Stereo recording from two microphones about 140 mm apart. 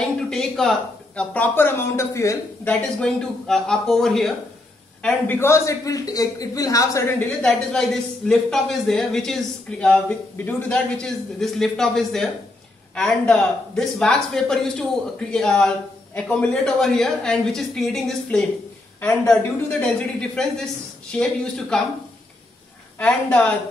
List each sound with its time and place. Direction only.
0.3 s speech: 5° left (ahead or behind); by 2.7 s 20° left (ahead or behind)
2.7 s a man's voice: 5° left (ahead or behind)
7.2 s speech: 5° left (ahead or behind)
22.9 s speech: 10° left (ahead or behind)